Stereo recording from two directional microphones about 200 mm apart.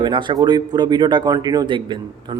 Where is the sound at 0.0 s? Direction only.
25° right (ahead or behind).